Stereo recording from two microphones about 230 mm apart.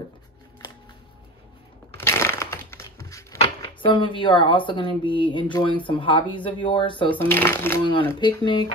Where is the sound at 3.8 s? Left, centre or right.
Left.